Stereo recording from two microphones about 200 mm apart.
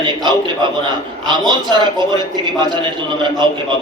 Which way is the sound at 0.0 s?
20° right (ahead or behind).